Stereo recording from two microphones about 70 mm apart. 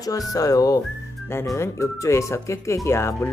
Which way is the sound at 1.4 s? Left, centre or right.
Left.